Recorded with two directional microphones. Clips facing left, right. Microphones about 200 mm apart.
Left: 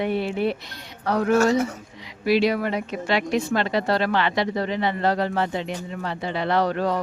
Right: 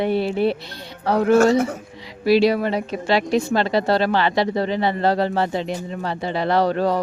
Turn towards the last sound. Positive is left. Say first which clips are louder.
# right 3 dB
turn(degrees=-35)  # may be behind; listen again after turning